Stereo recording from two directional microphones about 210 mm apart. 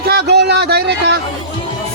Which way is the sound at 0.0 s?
50° right (ahead or behind).